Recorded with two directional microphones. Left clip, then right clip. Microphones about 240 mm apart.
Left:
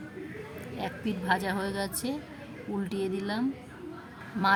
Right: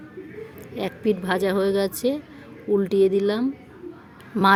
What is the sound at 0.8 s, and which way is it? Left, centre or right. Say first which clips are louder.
Speech: right 11 dB; right.